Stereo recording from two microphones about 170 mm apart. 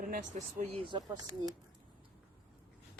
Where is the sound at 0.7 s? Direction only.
30° right (ahead or behind).